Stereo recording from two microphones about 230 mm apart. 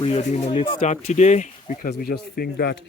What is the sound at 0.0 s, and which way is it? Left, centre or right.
Speech, left.